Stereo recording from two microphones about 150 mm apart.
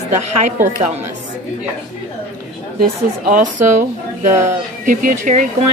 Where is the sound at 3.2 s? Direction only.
60° right (ahead or behind).